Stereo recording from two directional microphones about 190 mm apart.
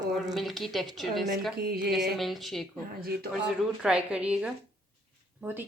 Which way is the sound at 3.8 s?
5° right (ahead or behind).